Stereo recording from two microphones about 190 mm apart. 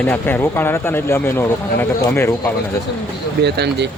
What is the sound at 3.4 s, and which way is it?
Speech, 60° right (ahead or behind).